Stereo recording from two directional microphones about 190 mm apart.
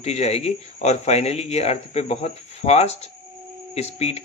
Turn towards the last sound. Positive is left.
turn(degrees=35)  # may be behind; listen again after turning